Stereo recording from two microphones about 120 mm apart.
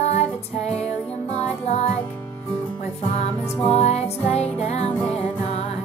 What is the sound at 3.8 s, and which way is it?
Music, 65° left (ahead or behind).